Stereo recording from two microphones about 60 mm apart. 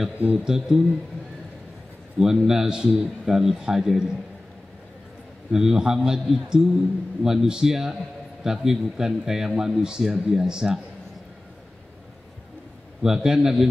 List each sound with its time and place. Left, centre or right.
0.5 s speech: centre
2.1 s speech: centre
5.5 s speech: centre
13.0 s speech: centre